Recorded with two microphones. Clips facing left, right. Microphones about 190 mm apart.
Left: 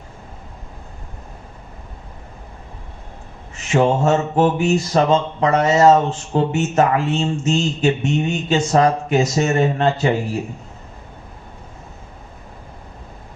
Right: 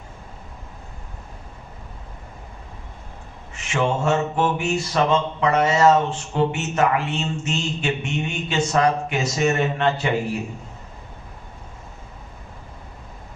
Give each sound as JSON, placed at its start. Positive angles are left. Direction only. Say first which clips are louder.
{"t": 3.7, "sound": "mantra", "louder": "left 5 dB", "side_deg": 40}